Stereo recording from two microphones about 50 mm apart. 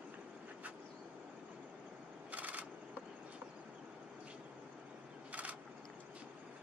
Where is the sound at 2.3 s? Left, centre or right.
Right.